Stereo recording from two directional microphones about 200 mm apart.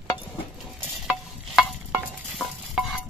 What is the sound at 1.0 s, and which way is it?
Stir, centre (ahead or behind).